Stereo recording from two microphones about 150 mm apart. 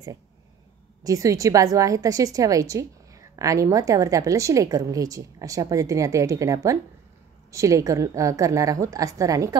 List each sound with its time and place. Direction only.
1.0 s a woman's voice: 20° right (ahead or behind)